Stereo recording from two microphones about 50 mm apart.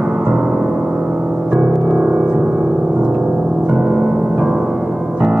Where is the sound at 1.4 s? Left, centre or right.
Centre.